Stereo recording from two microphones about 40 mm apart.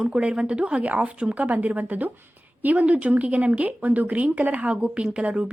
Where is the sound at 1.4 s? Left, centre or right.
Right.